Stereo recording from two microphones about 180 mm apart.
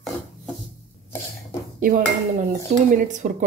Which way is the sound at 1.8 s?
50° right (ahead or behind).